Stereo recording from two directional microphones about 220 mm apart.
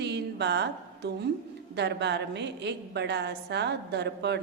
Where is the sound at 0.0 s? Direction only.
50° right (ahead or behind).